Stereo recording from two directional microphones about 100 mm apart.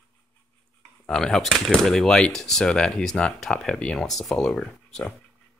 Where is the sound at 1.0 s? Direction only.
5° left (ahead or behind).